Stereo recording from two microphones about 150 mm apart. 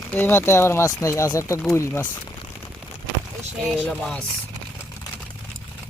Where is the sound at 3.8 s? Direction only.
5° left (ahead or behind).